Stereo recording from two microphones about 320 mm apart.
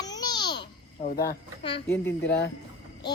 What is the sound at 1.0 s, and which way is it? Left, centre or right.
Speech, left.